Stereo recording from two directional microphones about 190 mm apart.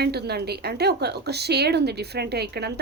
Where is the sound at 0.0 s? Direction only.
60° right (ahead or behind).